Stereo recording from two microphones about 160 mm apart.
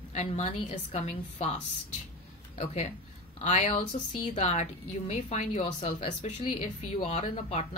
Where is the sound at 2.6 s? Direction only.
45° left (ahead or behind).